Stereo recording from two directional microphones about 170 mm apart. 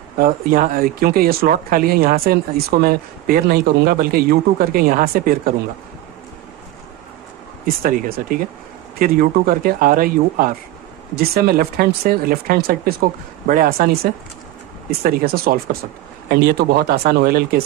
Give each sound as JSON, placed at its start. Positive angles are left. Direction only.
{"t": 0.2, "sound": "speech", "side_deg": -55}
{"t": 7.6, "sound": "speech", "side_deg": -55}
{"t": 14.9, "sound": "speech", "side_deg": -65}